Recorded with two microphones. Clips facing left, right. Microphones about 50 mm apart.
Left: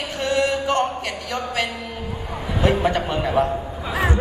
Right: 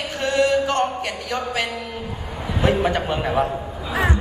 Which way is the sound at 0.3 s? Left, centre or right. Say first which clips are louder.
Right 2 dB; centre.